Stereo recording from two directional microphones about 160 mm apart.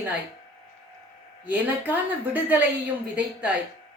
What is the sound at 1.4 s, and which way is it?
A woman's voice, 10° right (ahead or behind).